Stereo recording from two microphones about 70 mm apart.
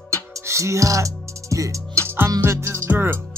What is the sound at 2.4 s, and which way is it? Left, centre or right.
Music, right.